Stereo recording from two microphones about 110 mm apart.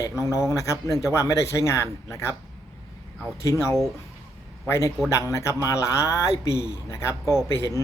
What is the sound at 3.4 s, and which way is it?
A man's voice, 25° left (ahead or behind).